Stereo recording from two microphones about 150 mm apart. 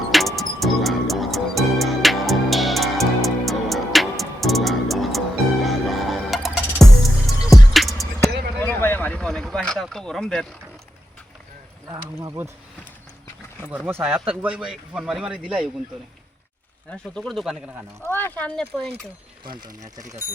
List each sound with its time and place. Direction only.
0.1 s music: centre (ahead or behind)
8.5 s a sound: 10° left (ahead or behind)
11.9 s speech: 25° right (ahead or behind)
13.8 s a man's voice: 10° right (ahead or behind)
16.9 s speech: 5° left (ahead or behind)
18.0 s speech: 15° left (ahead or behind)
20.0 s speech: 20° right (ahead or behind)